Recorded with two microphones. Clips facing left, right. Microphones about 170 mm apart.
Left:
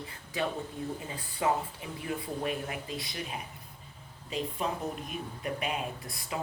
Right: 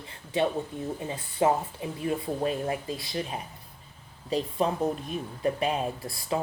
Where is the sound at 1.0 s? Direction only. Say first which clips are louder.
Right 6 dB; 25° right (ahead or behind).